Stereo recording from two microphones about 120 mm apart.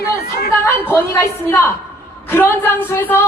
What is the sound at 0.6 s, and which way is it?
A woman's voice, 20° left (ahead or behind).